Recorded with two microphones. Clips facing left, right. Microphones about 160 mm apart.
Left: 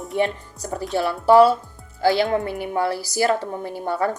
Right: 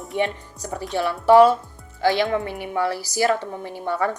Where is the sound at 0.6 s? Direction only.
40° left (ahead or behind).